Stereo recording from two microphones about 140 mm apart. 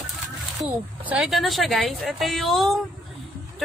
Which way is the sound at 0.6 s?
10° right (ahead or behind).